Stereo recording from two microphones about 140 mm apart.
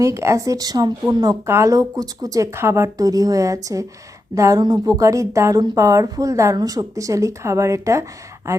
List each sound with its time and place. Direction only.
0.0 s a woman's voice: 20° right (ahead or behind)